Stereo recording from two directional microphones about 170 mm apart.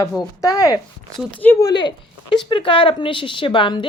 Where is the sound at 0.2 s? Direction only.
20° left (ahead or behind).